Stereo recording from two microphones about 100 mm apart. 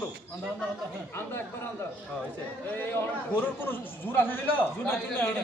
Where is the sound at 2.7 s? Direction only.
20° left (ahead or behind).